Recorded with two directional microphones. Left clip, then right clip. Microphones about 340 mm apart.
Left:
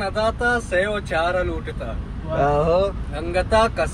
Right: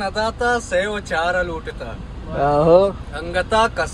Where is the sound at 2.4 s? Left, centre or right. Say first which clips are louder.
Right 5 dB; centre.